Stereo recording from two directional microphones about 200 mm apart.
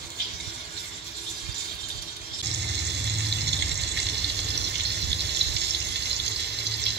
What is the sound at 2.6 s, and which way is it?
Water, 55° right (ahead or behind).